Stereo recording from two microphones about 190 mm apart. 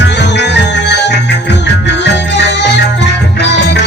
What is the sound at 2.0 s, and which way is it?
Music, 65° left (ahead or behind).